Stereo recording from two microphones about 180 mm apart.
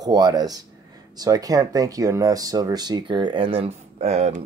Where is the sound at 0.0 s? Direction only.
20° right (ahead or behind).